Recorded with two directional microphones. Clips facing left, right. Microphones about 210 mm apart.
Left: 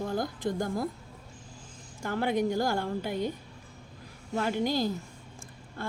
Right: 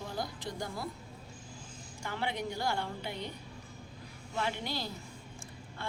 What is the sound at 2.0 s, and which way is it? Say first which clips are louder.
A woman's voice: left 9 dB; 45° left (ahead or behind).